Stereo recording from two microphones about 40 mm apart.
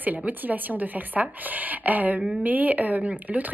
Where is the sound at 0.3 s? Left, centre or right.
Right.